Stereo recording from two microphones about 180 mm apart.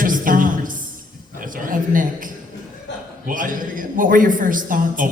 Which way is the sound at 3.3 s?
50° right (ahead or behind).